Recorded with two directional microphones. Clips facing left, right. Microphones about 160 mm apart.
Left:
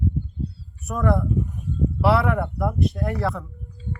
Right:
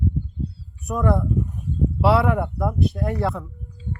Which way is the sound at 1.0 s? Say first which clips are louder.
Right 1 dB; 15° right (ahead or behind).